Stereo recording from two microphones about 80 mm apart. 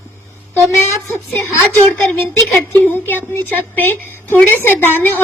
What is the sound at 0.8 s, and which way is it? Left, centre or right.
Speech, left.